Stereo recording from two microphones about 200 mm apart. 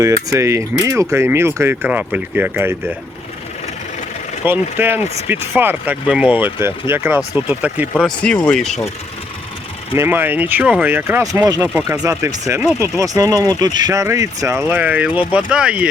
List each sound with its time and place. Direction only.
0.0 s speech: 15° right (ahead or behind)
4.4 s speech: 10° right (ahead or behind)
7.9 s speech: 5° left (ahead or behind)
10.0 s speech: 10° right (ahead or behind)
11.6 s speech: 5° right (ahead or behind)